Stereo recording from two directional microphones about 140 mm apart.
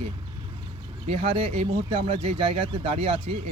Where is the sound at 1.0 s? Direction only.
45° right (ahead or behind).